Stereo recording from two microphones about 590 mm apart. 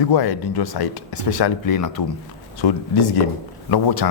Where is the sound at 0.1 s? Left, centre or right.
Left.